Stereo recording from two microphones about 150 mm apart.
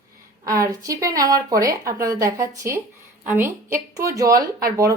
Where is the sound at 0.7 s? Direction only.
25° right (ahead or behind).